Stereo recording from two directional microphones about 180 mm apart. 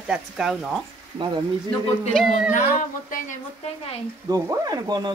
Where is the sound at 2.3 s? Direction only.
45° left (ahead or behind).